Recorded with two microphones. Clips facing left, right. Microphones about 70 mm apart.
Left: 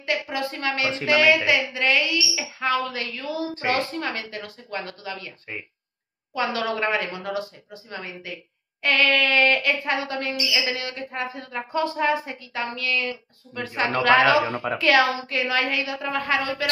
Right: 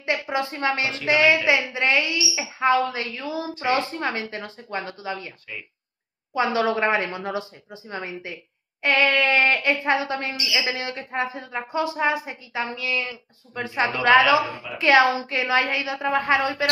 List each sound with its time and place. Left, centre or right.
0.0 s a woman's voice: right
6.3 s a woman's voice: right
14.5 s a woman's voice: left
14.8 s a woman's voice: right